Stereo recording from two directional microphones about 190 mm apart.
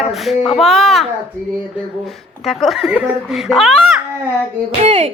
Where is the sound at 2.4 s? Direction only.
Centre (ahead or behind).